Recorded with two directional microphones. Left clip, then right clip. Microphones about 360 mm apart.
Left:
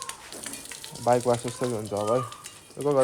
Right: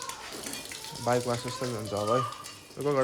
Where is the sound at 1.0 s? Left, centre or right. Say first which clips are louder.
Left 6 dB; centre.